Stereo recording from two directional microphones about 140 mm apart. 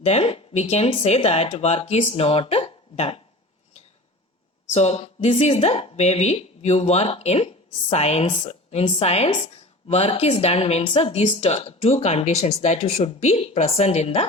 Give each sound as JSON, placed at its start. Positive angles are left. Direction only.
{"t": 0.0, "sound": "a woman's voice", "side_deg": 45}
{"t": 4.7, "sound": "a woman's voice", "side_deg": 50}